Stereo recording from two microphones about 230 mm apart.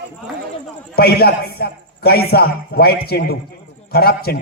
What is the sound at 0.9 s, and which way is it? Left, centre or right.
A man's voice, left.